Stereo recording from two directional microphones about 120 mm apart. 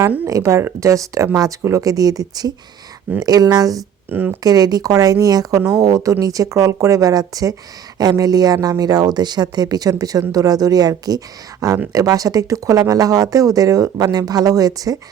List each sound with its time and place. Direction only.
0.3 s speech: 25° right (ahead or behind)
4.1 s speech: 15° right (ahead or behind)
4.4 s speech: 30° right (ahead or behind)